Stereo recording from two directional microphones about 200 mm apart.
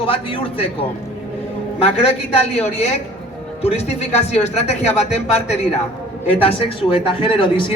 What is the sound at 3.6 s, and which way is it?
A man's voice, 30° left (ahead or behind).